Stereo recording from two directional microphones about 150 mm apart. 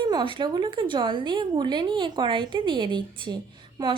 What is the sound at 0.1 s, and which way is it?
A woman's voice, 30° right (ahead or behind).